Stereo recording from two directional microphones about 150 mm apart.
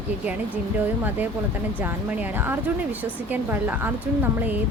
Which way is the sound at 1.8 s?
10° right (ahead or behind).